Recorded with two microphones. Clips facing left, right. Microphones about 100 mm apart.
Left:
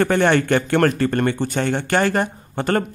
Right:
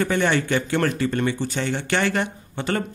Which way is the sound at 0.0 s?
50° left (ahead or behind).